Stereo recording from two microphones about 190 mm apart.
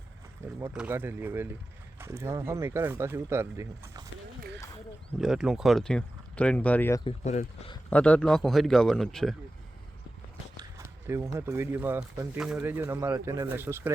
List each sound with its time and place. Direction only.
0.7 s speech: 5° right (ahead or behind)
5.2 s speech: centre (ahead or behind)
7.0 s speech: 35° left (ahead or behind)
7.9 s speech: 5° left (ahead or behind)
11.0 s speech: 15° right (ahead or behind)